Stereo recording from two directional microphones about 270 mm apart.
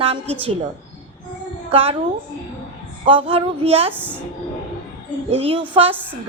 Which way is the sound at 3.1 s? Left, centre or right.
Centre.